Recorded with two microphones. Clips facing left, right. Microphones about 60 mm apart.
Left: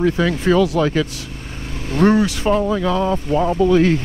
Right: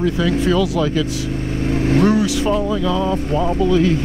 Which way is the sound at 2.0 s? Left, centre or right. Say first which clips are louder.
Left 1 dB; left.